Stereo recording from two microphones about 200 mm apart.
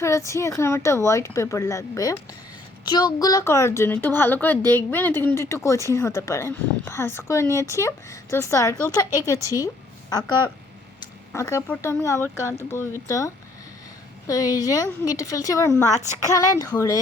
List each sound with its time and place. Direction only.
0.0 s a woman's voice: 15° left (ahead or behind)
9.4 s a woman's voice: 15° right (ahead or behind)
10.1 s a woman's voice: 20° left (ahead or behind)